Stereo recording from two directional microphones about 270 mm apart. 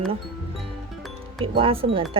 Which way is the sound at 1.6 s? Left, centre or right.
Centre.